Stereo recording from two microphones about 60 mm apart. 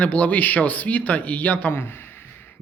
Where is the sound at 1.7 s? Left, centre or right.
Left.